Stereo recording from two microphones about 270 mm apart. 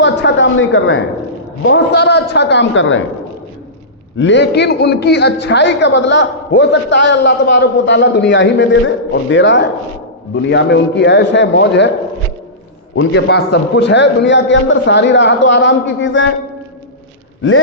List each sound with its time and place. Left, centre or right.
0.0 s a sound: left
1.6 s a man's voice: left
4.2 s a man's voice: left
13.0 s a man's voice: left